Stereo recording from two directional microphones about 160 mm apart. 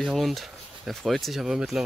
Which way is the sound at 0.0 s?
Centre (ahead or behind).